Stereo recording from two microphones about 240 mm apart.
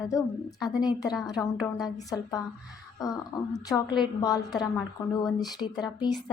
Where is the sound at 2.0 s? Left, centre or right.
Centre.